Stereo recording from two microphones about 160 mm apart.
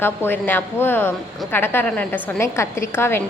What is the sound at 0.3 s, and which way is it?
A woman's voice, 10° left (ahead or behind).